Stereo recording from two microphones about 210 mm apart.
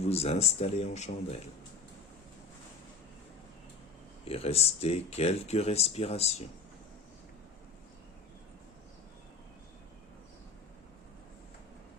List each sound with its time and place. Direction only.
0.1 s speech: 30° left (ahead or behind)
4.3 s speech: 30° left (ahead or behind)